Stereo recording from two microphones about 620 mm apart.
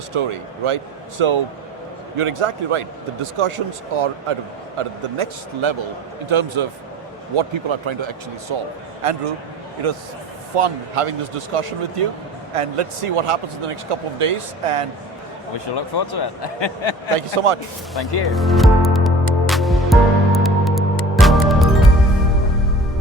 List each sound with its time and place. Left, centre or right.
0.1 s speech: right
9.0 s speech: right
15.5 s speech: left
17.2 s speech: right
17.9 s music: centre